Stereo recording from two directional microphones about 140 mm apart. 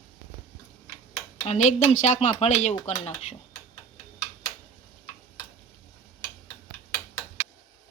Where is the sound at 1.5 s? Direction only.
55° left (ahead or behind).